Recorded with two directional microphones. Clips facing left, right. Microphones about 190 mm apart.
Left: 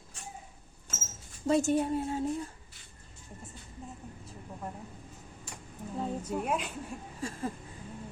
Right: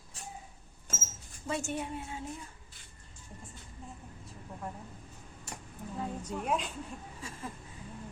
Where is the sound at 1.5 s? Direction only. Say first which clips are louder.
Left 9 dB; 35° left (ahead or behind).